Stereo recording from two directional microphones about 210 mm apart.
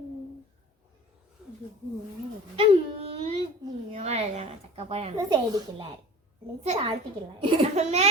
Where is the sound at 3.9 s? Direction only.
30° right (ahead or behind).